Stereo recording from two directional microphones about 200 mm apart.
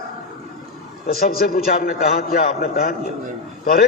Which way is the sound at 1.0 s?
45° left (ahead or behind).